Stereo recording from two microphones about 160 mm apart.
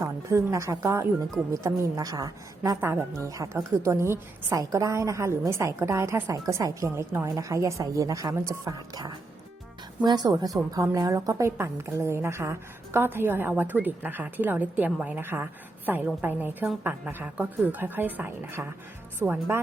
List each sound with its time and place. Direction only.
0.0 s a woman's voice: 15° right (ahead or behind)